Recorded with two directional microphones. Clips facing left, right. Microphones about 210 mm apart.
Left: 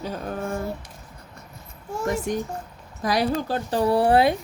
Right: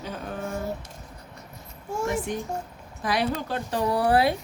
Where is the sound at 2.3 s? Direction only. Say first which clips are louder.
Left 3 dB; 40° left (ahead or behind); by 4.3 s 25° left (ahead or behind).